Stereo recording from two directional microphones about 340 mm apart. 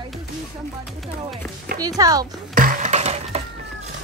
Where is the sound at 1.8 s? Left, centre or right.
Centre.